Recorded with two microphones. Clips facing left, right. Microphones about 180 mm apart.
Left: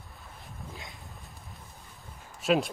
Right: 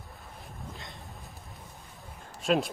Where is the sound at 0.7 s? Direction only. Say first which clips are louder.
Even; centre (ahead or behind).